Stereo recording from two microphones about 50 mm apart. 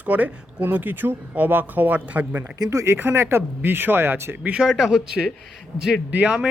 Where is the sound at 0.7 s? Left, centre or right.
Right.